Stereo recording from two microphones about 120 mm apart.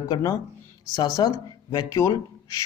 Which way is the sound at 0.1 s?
30° left (ahead or behind).